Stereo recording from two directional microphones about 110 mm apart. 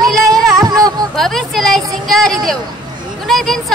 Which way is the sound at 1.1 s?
Centre (ahead or behind).